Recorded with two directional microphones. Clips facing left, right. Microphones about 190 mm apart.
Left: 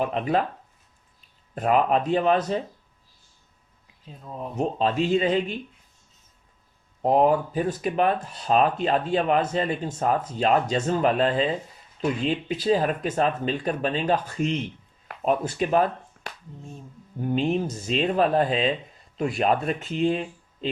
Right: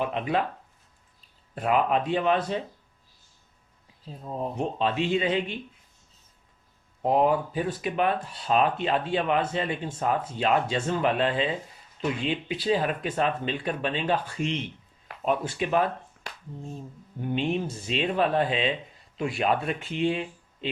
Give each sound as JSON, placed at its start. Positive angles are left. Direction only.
{"t": 0.0, "sound": "speech", "side_deg": 40}
{"t": 1.5, "sound": "speech", "side_deg": 40}
{"t": 4.0, "sound": "speech", "side_deg": -35}
{"t": 4.5, "sound": "speech", "side_deg": 40}
{"t": 7.0, "sound": "speech", "side_deg": 45}
{"t": 17.2, "sound": "speech", "side_deg": 40}